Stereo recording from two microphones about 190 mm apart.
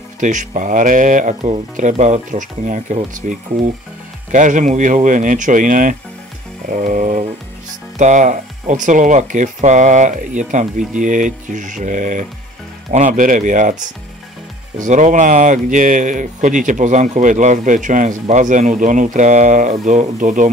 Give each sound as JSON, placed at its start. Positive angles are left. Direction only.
{"t": 0.2, "sound": "speech", "side_deg": -40}
{"t": 6.7, "sound": "music", "side_deg": -40}
{"t": 8.0, "sound": "speech", "side_deg": -40}